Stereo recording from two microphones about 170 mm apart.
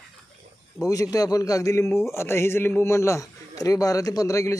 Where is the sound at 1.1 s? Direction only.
20° left (ahead or behind).